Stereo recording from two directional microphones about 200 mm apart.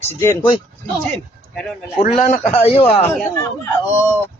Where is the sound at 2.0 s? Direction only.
35° left (ahead or behind).